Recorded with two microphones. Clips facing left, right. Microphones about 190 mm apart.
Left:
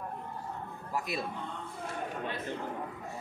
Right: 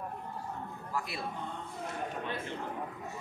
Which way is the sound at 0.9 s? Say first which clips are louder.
Left 3 dB; 20° left (ahead or behind).